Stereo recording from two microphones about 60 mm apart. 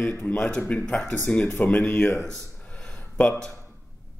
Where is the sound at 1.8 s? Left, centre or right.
Left.